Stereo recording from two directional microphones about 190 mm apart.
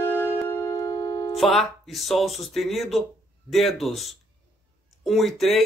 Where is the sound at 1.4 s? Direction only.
Centre (ahead or behind).